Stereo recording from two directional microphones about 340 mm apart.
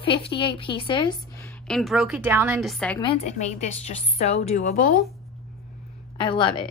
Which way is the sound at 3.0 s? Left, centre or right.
Centre.